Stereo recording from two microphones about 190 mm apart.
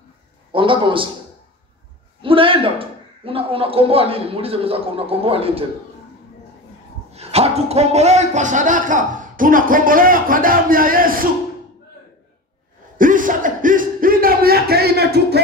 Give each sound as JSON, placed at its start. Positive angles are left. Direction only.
{"t": 0.5, "sound": "a man's voice", "side_deg": -25}
{"t": 2.2, "sound": "a man's voice", "side_deg": -30}
{"t": 7.1, "sound": "a man's voice", "side_deg": -35}
{"t": 12.9, "sound": "a sound", "side_deg": -45}